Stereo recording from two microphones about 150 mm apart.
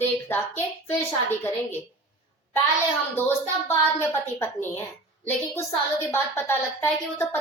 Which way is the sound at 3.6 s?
15° left (ahead or behind).